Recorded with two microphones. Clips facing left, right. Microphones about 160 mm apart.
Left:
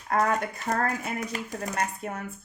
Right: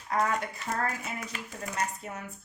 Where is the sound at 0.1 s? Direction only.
50° left (ahead or behind).